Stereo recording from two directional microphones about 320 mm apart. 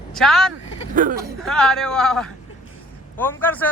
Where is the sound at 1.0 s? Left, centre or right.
Right.